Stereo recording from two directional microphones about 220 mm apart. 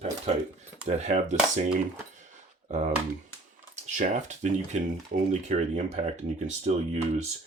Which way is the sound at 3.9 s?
30° right (ahead or behind).